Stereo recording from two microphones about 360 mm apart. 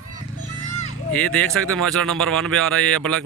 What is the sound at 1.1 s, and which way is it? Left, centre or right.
Speech, centre.